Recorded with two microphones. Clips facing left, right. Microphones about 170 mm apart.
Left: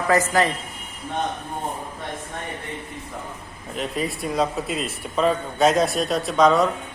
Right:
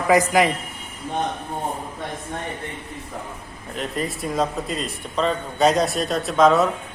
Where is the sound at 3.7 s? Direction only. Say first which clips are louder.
Even; centre (ahead or behind).